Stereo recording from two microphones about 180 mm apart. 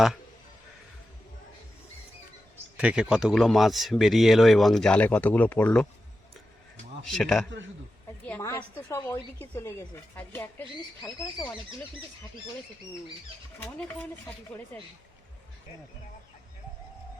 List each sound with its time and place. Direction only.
2.7 s a man's voice: 5° right (ahead or behind)
7.1 s a man's voice: centre (ahead or behind)
8.3 s a woman's voice: 15° left (ahead or behind)
13.6 s a woman's voice: 5° left (ahead or behind)